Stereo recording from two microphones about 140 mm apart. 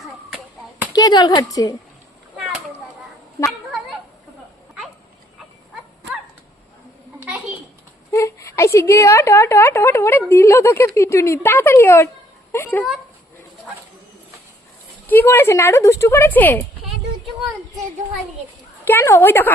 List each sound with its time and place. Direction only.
0.9 s a woman's voice: 30° left (ahead or behind)
3.4 s a sound: centre (ahead or behind)
8.1 s a woman's voice: 20° left (ahead or behind)
15.0 s speech: 15° left (ahead or behind)
18.9 s speech: 15° left (ahead or behind)